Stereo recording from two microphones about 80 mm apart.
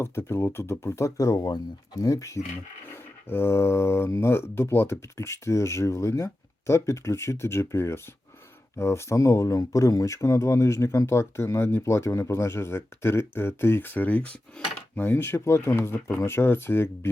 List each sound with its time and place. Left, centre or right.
0.0 s speech: left
2.0 s speech: left
3.2 s speech: left